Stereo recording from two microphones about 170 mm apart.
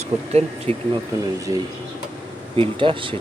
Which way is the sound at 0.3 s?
35° right (ahead or behind).